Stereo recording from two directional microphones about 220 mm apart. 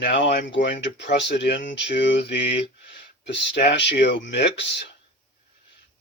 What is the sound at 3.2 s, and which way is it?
Speech, 50° left (ahead or behind).